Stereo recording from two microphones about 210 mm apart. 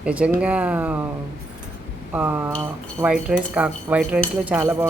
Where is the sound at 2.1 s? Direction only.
10° right (ahead or behind).